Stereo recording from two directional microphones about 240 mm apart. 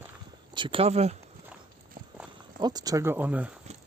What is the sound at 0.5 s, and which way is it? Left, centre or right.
Speech, right.